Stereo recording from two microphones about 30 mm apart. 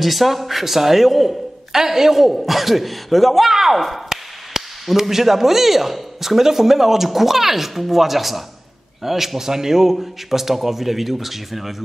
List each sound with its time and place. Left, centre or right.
0.0 s a man's voice: centre
1.7 s a man's voice: centre
3.4 s speech: centre
4.6 s a sound: centre
4.9 s speech: centre